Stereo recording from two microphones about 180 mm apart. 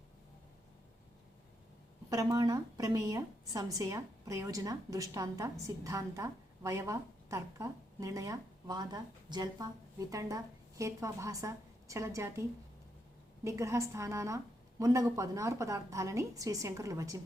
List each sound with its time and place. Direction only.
2.0 s a woman's voice: 20° right (ahead or behind)